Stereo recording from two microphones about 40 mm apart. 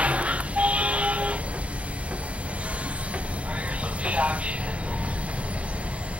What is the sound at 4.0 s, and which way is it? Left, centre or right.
Music, right.